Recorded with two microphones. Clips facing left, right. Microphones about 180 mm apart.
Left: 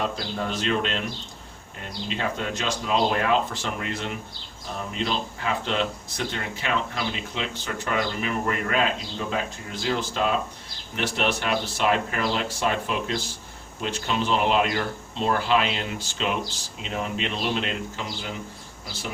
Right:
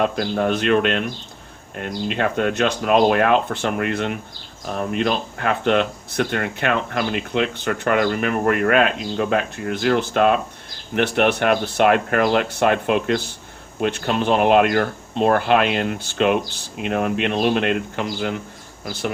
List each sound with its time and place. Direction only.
0.0 s speech: 60° right (ahead or behind)